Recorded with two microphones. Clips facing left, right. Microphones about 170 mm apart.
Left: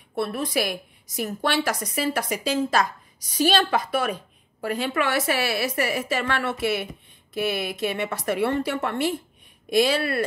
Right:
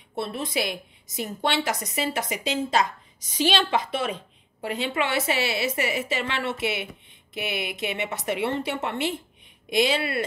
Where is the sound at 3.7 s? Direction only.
25° right (ahead or behind).